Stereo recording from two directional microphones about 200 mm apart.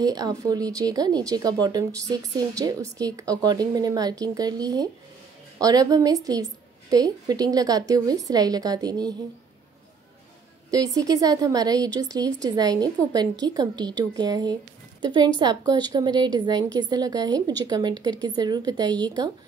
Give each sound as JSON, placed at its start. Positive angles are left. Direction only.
{"t": 0.0, "sound": "a woman's voice", "side_deg": -20}
{"t": 10.7, "sound": "a woman's voice", "side_deg": -15}